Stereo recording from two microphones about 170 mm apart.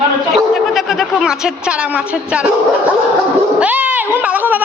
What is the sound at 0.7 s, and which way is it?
A woman's voice, centre (ahead or behind).